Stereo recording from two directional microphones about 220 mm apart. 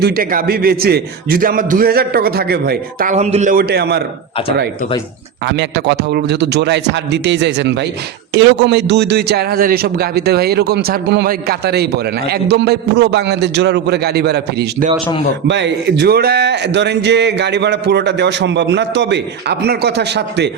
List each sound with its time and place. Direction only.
0.0 s a man's voice: 40° right (ahead or behind)
5.5 s a man's voice: 50° right (ahead or behind)